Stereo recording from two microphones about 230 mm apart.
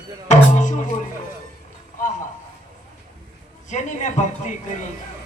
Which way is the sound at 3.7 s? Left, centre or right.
Left.